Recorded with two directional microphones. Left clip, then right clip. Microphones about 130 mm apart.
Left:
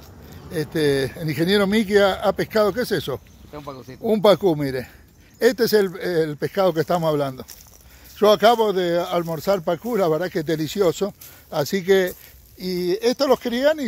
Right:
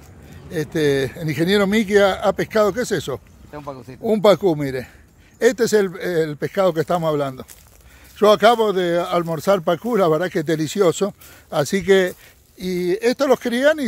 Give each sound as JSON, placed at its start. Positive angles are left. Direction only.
{"t": 0.5, "sound": "speech", "side_deg": -15}
{"t": 8.2, "sound": "speech", "side_deg": -20}
{"t": 9.3, "sound": "speech", "side_deg": -40}